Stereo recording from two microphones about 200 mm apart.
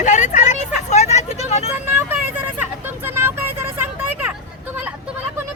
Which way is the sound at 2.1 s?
10° right (ahead or behind).